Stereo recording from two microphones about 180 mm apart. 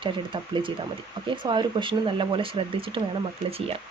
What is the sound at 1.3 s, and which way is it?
Speech, 25° right (ahead or behind).